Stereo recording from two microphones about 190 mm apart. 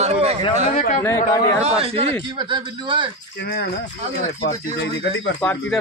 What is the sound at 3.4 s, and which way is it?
Speech, 55° left (ahead or behind).